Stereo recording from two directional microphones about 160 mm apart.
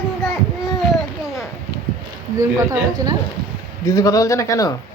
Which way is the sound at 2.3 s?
20° right (ahead or behind).